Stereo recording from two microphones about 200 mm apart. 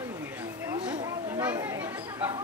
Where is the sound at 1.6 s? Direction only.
10° right (ahead or behind).